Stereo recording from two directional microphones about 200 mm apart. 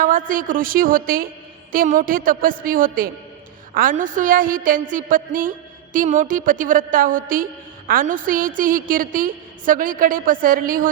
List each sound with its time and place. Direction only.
0.0 s a woman's voice: 45° right (ahead or behind)